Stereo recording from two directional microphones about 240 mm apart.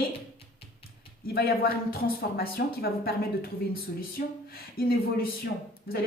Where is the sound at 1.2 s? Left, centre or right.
Left.